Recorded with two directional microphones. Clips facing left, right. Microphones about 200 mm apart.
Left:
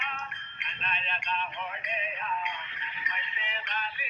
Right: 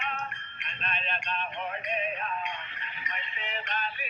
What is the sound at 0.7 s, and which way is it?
Music, 45° right (ahead or behind).